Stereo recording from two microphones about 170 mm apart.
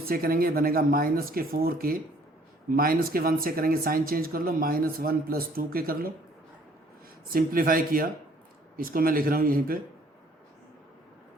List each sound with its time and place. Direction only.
0.1 s speech: 60° right (ahead or behind)
7.3 s speech: 55° right (ahead or behind)